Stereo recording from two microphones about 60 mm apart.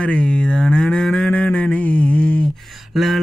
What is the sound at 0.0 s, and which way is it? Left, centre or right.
Cattle, centre.